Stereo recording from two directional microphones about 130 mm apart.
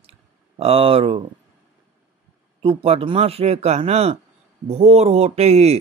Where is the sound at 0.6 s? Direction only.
45° right (ahead or behind).